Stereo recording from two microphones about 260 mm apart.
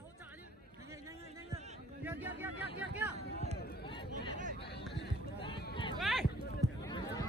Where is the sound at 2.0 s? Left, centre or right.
Centre.